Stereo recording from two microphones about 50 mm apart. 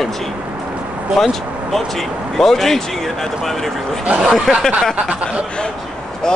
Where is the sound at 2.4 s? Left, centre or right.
Centre.